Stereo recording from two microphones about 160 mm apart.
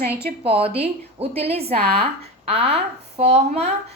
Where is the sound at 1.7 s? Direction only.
80° right.